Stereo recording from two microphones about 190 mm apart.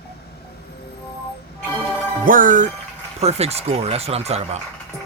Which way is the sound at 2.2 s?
45° right (ahead or behind).